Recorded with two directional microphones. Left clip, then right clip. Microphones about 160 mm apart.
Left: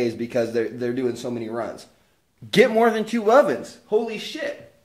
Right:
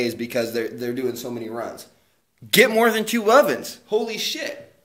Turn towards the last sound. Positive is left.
turn(degrees=25)  # may be behind; listen again after turning